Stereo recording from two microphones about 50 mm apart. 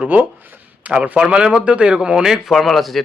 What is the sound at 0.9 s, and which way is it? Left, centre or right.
Speech, right.